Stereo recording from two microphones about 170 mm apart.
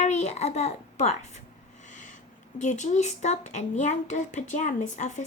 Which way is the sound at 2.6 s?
45° left (ahead or behind).